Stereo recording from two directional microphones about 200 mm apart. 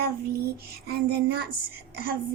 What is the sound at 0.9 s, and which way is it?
A child's voice, 50° right (ahead or behind).